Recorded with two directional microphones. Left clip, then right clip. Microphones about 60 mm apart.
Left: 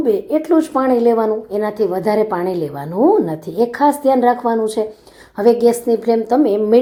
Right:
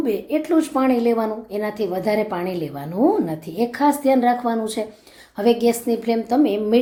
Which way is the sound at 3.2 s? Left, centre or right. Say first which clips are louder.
Left 6 dB; left.